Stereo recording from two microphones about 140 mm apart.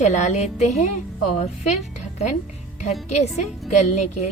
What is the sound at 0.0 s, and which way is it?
Speech, 55° left (ahead or behind).